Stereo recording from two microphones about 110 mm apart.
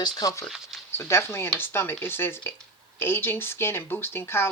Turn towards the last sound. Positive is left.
turn(degrees=20)  # may be behind; listen again after turning